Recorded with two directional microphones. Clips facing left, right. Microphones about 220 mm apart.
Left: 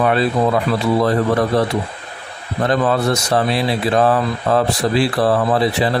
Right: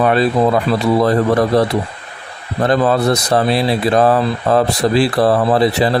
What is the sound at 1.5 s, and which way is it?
Speech, 40° right (ahead or behind).